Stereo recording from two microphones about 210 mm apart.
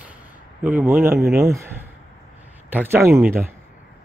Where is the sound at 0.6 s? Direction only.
10° right (ahead or behind).